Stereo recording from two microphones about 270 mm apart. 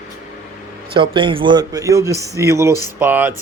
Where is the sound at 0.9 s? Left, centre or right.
Centre.